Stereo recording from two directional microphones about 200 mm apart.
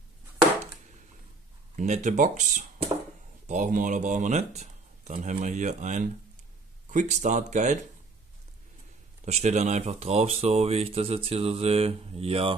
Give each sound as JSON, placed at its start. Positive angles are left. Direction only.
{"t": 1.8, "sound": "speech", "side_deg": -35}
{"t": 9.2, "sound": "speech", "side_deg": -35}